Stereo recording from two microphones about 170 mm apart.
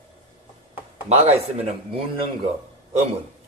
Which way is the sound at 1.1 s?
35° right (ahead or behind).